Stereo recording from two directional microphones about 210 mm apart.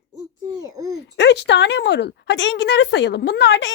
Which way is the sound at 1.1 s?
55° left (ahead or behind).